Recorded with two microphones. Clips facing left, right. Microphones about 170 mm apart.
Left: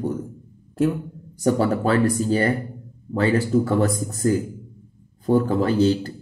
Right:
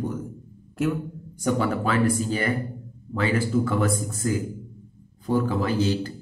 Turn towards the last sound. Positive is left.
turn(degrees=40)  # may be behind; listen again after turning